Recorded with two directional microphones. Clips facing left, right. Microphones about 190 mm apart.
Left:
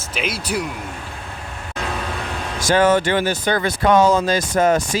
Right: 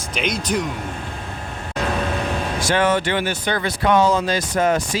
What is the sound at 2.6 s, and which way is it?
Speech, 45° left (ahead or behind).